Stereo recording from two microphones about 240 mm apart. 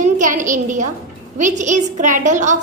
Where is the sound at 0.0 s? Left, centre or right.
Right.